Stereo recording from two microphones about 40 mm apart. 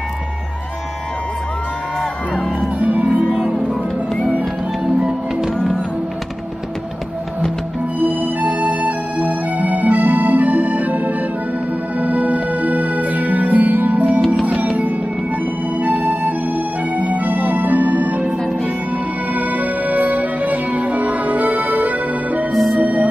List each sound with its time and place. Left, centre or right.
2.8 s music: right
3.3 s music: centre
8.0 s music: right
19.3 s music: right
22.5 s music: centre